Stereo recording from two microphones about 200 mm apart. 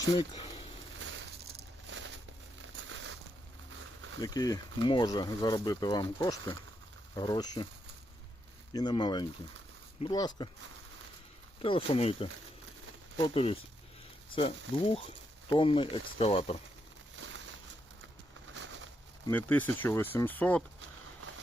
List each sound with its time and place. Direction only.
1.5 s a sound: 65° right (ahead or behind)
4.2 s speech: 20° left (ahead or behind)
8.7 s speech: 20° left (ahead or behind)
11.6 s speech: 30° left (ahead or behind)
17.2 s a sound: 70° right (ahead or behind)
19.3 s speech: 10° left (ahead or behind)